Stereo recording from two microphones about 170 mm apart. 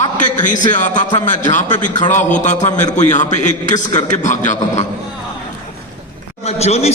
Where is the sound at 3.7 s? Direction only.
20° left (ahead or behind).